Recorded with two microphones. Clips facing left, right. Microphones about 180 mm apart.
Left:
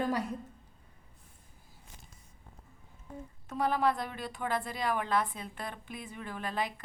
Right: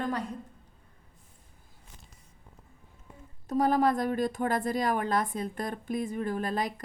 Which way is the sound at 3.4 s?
40° right (ahead or behind).